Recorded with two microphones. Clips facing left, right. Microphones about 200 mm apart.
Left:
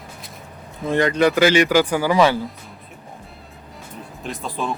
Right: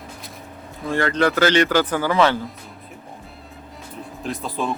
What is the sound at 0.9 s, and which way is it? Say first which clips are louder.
Speech: left 3 dB; 15° left (ahead or behind).